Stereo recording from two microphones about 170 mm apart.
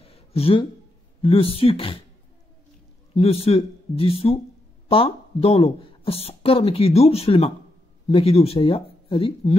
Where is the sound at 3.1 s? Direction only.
35° left (ahead or behind).